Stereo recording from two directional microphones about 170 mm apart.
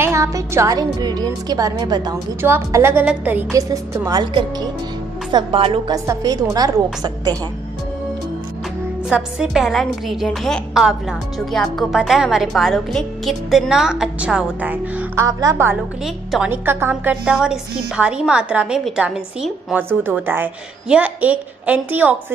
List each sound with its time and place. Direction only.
0.0 s a woman's voice: 20° right (ahead or behind)
2.4 s a woman's voice: 15° right (ahead or behind); by 5.9 s 35° right (ahead or behind)
5.9 s a woman's voice: 20° right (ahead or behind)
9.1 s a woman's voice: 5° right (ahead or behind)